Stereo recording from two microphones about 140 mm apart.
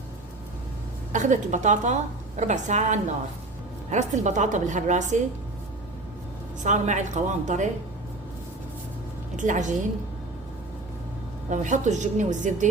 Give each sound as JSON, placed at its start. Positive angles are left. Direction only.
{"t": 1.1, "sound": "a woman's voice", "side_deg": -60}
{"t": 6.6, "sound": "a woman's voice", "side_deg": -60}
{"t": 9.3, "sound": "a woman's voice", "side_deg": -65}
{"t": 11.5, "sound": "a woman's voice", "side_deg": -60}